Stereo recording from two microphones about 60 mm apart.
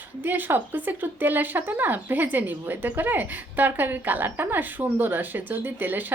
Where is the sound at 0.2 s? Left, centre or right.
Right.